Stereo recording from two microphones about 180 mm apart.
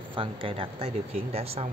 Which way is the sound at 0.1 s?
30° right (ahead or behind).